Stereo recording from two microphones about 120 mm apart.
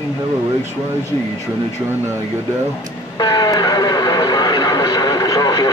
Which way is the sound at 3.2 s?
35° left (ahead or behind).